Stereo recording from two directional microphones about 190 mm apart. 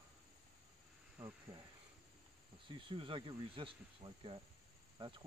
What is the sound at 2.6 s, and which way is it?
Speech, 25° right (ahead or behind).